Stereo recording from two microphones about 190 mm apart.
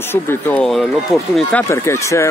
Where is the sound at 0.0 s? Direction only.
10° left (ahead or behind).